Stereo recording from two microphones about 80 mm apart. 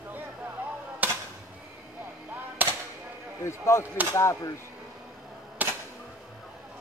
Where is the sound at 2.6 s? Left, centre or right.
Right.